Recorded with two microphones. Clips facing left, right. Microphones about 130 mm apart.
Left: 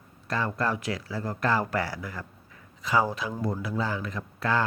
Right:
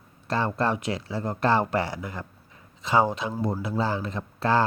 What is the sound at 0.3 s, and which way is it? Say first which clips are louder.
Speech: right 3 dB; 30° right (ahead or behind).